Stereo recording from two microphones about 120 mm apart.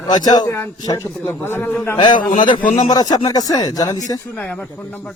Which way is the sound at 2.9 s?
35° left (ahead or behind).